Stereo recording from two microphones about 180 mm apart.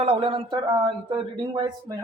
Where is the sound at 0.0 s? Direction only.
35° right (ahead or behind).